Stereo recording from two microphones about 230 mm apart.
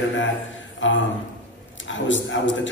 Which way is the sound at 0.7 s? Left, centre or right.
Left.